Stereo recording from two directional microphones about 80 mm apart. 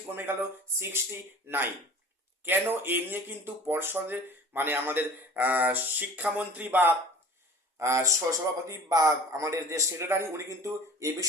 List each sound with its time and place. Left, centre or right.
0.1 s speech: right
1.5 s speech: right
7.8 s a man's voice: right